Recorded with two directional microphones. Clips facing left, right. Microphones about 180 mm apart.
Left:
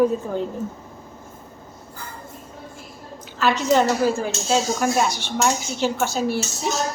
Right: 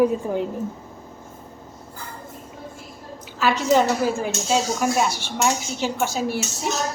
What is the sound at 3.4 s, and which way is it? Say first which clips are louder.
A woman's voice: even; 10° right (ahead or behind).